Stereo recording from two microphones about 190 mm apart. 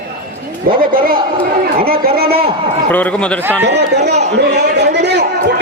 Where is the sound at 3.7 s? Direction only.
60° right (ahead or behind).